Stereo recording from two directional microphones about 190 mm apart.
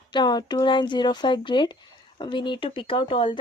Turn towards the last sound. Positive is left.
turn(degrees=25)  # may be behind; listen again after turning